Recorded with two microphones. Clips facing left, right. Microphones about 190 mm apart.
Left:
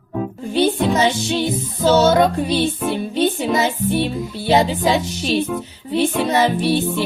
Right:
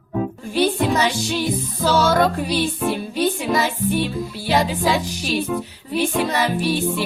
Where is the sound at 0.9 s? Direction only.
25° left (ahead or behind).